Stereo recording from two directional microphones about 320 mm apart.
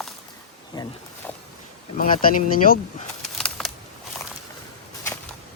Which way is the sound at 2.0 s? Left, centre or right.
Left.